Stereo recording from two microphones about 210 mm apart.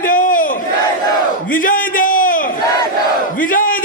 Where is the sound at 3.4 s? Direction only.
40° left (ahead or behind).